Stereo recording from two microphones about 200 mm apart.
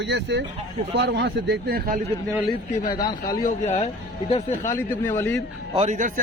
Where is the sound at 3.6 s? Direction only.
35° left (ahead or behind).